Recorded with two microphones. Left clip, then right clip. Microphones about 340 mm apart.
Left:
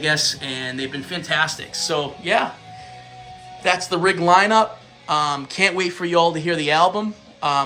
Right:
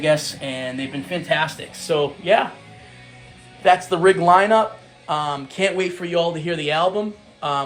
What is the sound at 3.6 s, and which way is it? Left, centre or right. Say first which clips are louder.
A man's voice: right 4 dB; centre.